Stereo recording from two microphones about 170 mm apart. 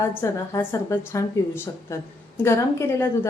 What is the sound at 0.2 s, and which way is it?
A woman's voice, 15° left (ahead or behind).